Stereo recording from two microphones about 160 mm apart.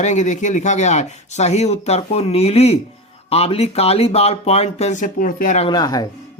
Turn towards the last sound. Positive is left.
turn(degrees=25)  # may be behind; listen again after turning